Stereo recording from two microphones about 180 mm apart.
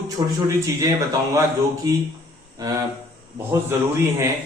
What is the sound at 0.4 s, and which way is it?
A man's voice, 20° right (ahead or behind).